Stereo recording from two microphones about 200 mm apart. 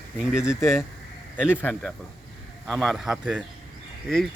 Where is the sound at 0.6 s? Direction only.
10° left (ahead or behind).